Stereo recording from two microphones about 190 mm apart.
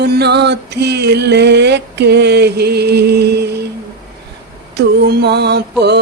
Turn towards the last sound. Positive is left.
turn(degrees=-60)  # may be behind; listen again after turning